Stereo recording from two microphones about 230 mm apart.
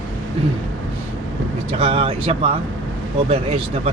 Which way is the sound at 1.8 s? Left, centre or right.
Right.